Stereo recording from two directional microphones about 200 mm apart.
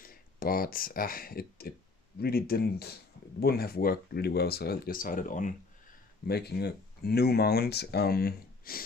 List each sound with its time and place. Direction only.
0.0 s speech: 45° left (ahead or behind)
6.2 s speech: 55° left (ahead or behind)